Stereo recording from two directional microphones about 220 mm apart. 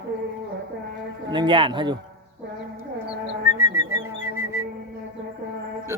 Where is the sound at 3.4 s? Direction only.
10° right (ahead or behind).